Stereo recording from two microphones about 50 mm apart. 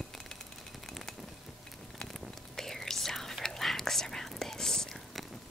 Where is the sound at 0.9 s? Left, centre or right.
Centre.